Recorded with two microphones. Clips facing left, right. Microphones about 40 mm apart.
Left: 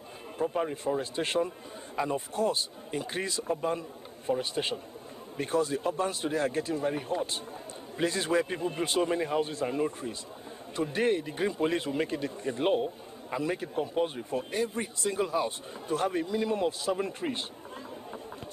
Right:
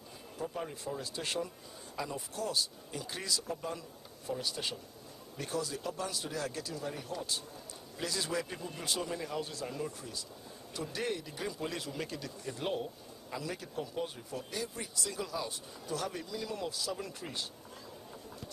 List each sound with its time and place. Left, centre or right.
0.4 s speech: left